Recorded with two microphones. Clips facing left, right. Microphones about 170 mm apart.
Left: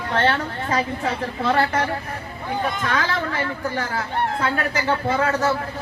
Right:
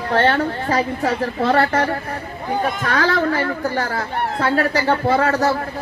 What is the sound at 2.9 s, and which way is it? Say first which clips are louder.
A woman's voice: right 6 dB; 35° right (ahead or behind).